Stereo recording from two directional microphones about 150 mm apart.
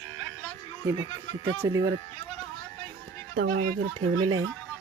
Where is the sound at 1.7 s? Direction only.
20° right (ahead or behind).